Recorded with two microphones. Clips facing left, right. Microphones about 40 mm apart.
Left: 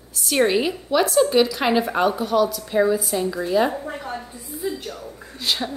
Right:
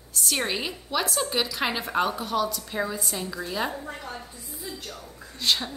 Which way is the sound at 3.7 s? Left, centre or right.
Left.